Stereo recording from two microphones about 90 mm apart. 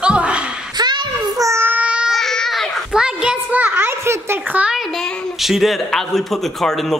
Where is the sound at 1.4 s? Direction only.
30° right (ahead or behind).